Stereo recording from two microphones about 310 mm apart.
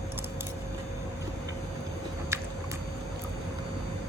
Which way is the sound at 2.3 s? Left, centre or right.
Centre.